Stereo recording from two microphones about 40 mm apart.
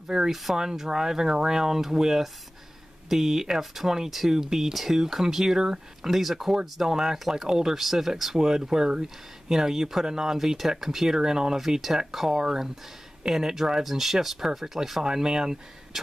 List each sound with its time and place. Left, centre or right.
0.3 s speech: centre
13.8 s speech: centre